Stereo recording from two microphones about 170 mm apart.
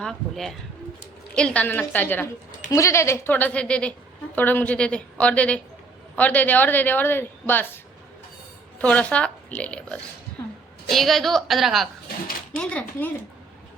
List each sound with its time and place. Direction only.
0.0 s a woman's voice: centre (ahead or behind)
8.8 s speech: 5° left (ahead or behind)
10.4 s a sound: 15° left (ahead or behind)
10.8 s a woman's voice: centre (ahead or behind)